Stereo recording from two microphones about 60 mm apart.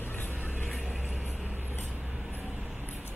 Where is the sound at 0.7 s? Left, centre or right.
Centre.